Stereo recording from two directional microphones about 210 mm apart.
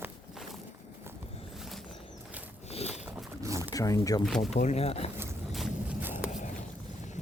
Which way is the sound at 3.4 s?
15° right (ahead or behind).